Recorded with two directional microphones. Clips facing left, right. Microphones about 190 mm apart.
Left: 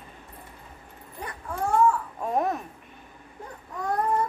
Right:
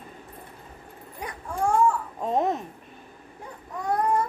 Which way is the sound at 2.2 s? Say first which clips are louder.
Right 2 dB; 20° right (ahead or behind).